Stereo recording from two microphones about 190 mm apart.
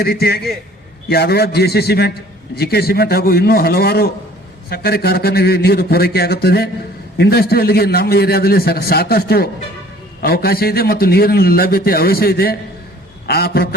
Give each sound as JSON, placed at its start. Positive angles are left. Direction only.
{"t": 0.0, "sound": "a man's voice", "side_deg": 55}